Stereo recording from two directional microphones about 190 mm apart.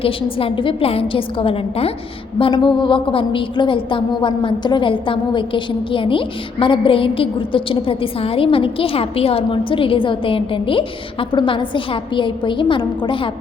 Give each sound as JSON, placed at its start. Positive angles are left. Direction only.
{"t": 0.0, "sound": "a woman's voice", "side_deg": 30}